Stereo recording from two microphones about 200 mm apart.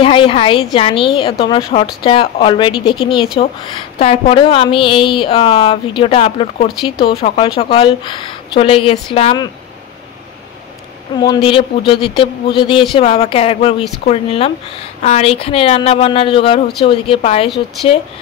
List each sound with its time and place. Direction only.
0.0 s a woman's voice: 25° left (ahead or behind)
11.1 s a woman's voice: 25° left (ahead or behind)